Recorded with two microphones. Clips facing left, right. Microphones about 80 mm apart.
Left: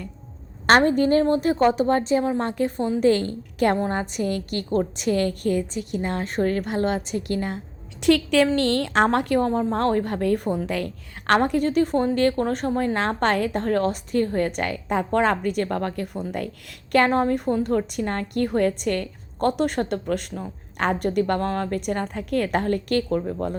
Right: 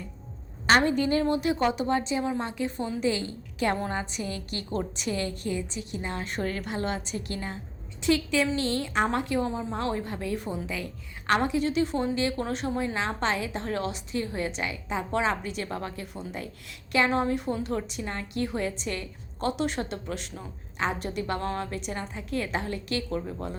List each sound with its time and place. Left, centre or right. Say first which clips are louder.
0.7 s a woman's voice: left 6 dB; left
8.0 s a woman's voice: left 7 dB; left
9.0 s a woman's voice: left 7 dB; left